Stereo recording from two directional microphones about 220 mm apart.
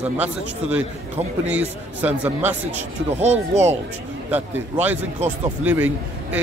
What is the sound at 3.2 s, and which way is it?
Speech, 30° right (ahead or behind).